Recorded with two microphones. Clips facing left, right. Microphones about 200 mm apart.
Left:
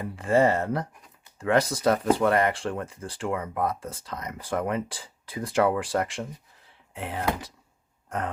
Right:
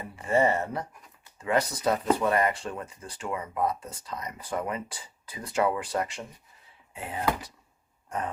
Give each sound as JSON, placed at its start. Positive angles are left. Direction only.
{"t": 0.2, "sound": "speech", "side_deg": 90}
{"t": 2.1, "sound": "speech", "side_deg": 75}
{"t": 3.3, "sound": "speech", "side_deg": 60}
{"t": 6.9, "sound": "speech", "side_deg": 75}